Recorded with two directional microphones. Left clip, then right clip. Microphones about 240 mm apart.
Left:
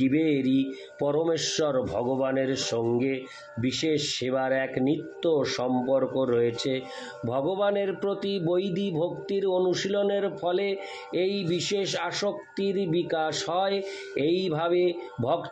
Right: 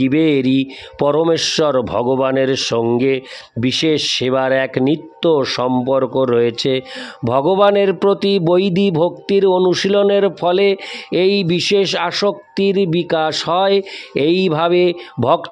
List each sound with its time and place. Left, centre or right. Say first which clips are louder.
0.0 s speech: right 10 dB; right